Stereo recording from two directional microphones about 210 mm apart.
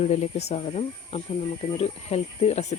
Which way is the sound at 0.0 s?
30° left (ahead or behind).